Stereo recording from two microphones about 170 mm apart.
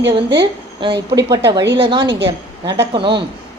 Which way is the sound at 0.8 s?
30° right (ahead or behind).